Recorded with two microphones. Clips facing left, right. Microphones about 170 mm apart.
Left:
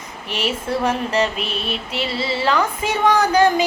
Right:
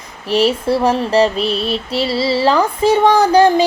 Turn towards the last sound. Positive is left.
turn(degrees=-35)  # may be behind; listen again after turning